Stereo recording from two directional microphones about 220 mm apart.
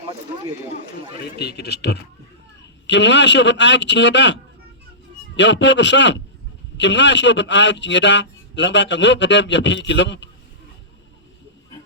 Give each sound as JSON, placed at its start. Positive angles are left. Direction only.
{"t": 1.2, "sound": "speech", "side_deg": 50}
{"t": 5.4, "sound": "a man's voice", "side_deg": 55}